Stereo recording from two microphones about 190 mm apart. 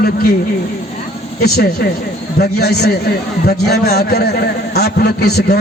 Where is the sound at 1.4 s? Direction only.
55° left (ahead or behind).